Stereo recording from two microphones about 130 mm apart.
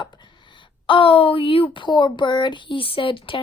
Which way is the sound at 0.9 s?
45° left (ahead or behind).